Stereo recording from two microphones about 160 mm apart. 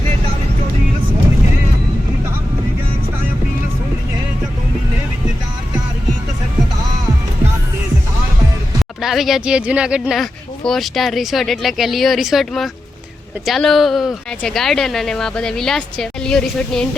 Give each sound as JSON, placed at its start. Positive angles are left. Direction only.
{"t": 9.0, "sound": "speech", "side_deg": 0}